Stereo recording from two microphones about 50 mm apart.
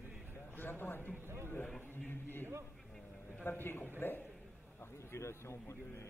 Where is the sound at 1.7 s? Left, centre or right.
Left.